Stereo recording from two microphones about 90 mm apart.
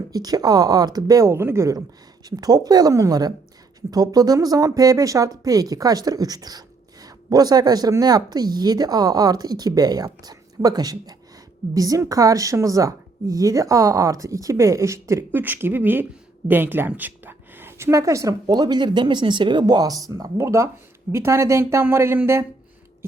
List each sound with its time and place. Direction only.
0.1 s a woman's voice: 45° right (ahead or behind); by 1.7 s 30° right (ahead or behind)
2.3 s a woman's voice: 45° right (ahead or behind)
15.3 s a woman's voice: 20° right (ahead or behind); by 20.3 s 45° right (ahead or behind)
20.4 s a woman's voice: 30° right (ahead or behind)